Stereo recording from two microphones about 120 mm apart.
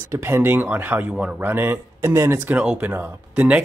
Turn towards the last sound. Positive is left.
turn(degrees=-10)  # may be behind; listen again after turning